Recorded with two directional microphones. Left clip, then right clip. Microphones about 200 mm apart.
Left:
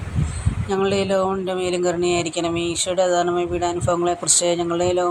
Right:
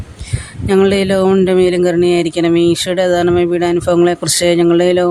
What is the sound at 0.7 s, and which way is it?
Speech, 55° right (ahead or behind).